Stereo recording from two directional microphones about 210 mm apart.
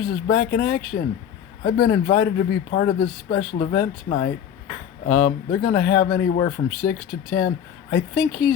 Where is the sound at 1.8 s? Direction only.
55° left (ahead or behind).